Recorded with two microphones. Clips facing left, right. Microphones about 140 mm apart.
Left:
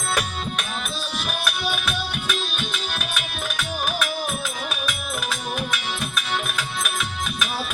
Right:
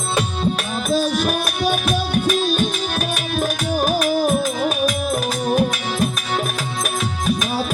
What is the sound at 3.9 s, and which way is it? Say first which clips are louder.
Music: right 10 dB; 40° right (ahead or behind).